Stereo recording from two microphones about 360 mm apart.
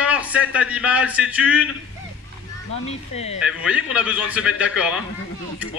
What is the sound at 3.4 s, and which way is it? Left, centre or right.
A man's voice, centre.